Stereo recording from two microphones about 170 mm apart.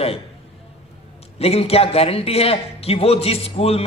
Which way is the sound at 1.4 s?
35° left (ahead or behind).